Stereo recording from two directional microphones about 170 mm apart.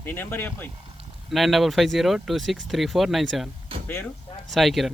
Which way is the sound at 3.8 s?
10° left (ahead or behind).